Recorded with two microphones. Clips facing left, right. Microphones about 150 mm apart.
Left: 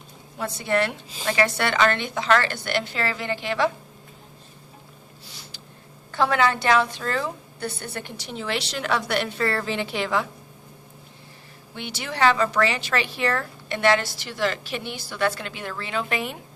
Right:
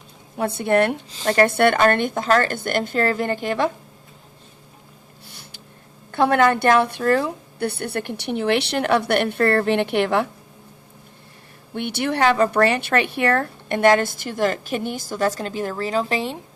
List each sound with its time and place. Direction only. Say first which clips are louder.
0.3 s a woman's voice: right 6 dB; 55° right (ahead or behind)
5.2 s a sound: right 1 dB; 55° right (ahead or behind)
6.1 s a woman's voice: right 5 dB; 55° right (ahead or behind)
11.7 s a woman's voice: right 9 dB; 55° right (ahead or behind); by 16.4 s 30° right (ahead or behind)